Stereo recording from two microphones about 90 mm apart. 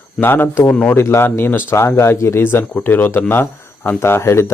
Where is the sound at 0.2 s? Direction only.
25° left (ahead or behind).